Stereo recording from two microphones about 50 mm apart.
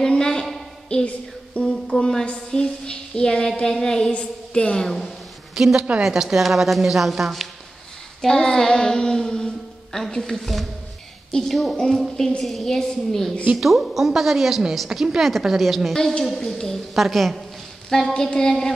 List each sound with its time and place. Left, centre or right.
0.0 s a sound: centre
1.0 s music: left
1.7 s a sound: centre
2.2 s a woman's voice: centre
4.1 s a woman's voice: left
5.5 s a woman's voice: centre
8.2 s child singing: centre
9.9 s a woman's voice: centre
11.7 s a woman's voice: centre
12.4 s a woman's voice: centre
13.6 s a woman's voice: centre
15.9 s a woman's voice: centre